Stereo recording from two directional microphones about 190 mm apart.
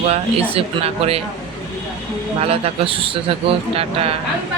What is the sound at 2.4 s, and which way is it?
Speech, 30° right (ahead or behind).